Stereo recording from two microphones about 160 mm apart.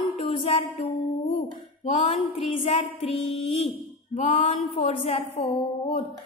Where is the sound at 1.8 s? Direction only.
40° left (ahead or behind).